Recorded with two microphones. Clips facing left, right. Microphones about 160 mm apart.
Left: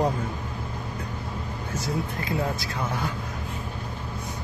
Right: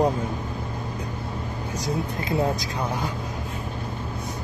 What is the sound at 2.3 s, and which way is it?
Speech, 20° right (ahead or behind).